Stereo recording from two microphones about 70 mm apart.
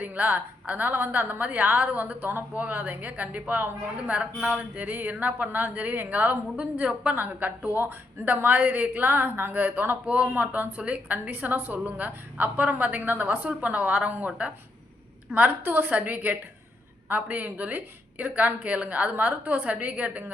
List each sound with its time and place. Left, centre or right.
0.0 s a woman's voice: right